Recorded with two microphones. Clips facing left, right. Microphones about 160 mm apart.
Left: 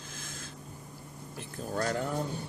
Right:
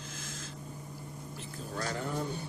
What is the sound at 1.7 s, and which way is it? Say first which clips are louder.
Cat: left 6 dB; 50° left (ahead or behind).